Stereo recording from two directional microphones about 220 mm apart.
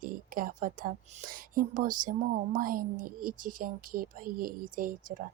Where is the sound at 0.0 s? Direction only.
40° right (ahead or behind).